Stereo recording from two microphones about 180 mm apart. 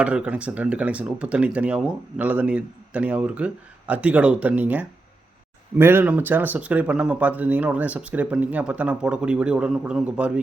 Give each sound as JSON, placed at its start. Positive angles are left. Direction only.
{"t": 0.0, "sound": "speech", "side_deg": -5}